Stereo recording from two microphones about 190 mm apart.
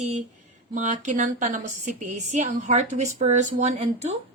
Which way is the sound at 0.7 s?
40° right (ahead or behind).